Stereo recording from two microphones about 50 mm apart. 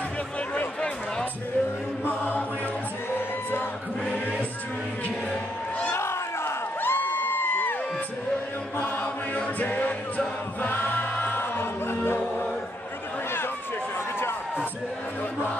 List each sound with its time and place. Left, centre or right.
0.7 s a sound: centre
2.0 s chant: left
5.9 s crowd: left
8.7 s music: left